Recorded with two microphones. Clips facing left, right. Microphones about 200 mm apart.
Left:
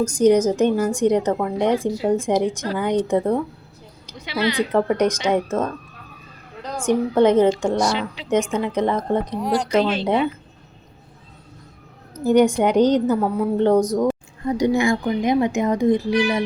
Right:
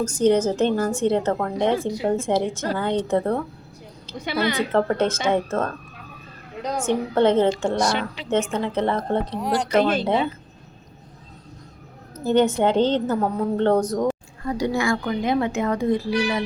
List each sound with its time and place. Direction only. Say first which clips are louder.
0.1 s speech: left 2 dB; 10° left (ahead or behind)
4.5 s speech: left 3 dB; 15° left (ahead or behind)
6.8 s speech: left 3 dB; 10° left (ahead or behind)
9.4 s speech: left 2 dB; centre (ahead or behind)
9.7 s speech: right 1 dB; 50° right (ahead or behind)
12.2 s a woman's voice: left 3 dB; 10° left (ahead or behind)